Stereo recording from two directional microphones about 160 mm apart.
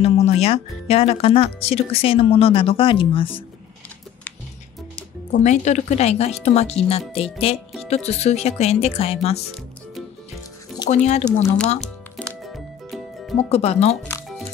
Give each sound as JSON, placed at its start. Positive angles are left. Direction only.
{"t": 0.0, "sound": "speech", "side_deg": 40}
{"t": 5.3, "sound": "speech", "side_deg": 50}
{"t": 10.9, "sound": "speech", "side_deg": 45}
{"t": 11.8, "sound": "music", "side_deg": 5}
{"t": 13.4, "sound": "speech", "side_deg": 40}